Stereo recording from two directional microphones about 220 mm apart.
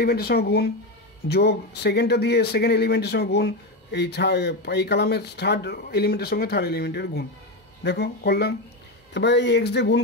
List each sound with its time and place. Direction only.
0.0 s speech: 45° left (ahead or behind)